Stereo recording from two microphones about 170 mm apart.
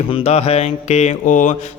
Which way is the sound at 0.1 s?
40° left (ahead or behind).